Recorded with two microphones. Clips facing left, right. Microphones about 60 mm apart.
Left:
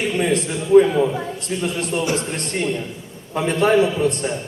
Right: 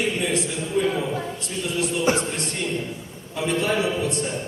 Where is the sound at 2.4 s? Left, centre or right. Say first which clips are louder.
Left 4 dB; left.